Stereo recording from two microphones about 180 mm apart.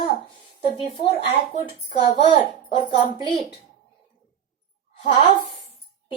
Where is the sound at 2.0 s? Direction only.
25° left (ahead or behind).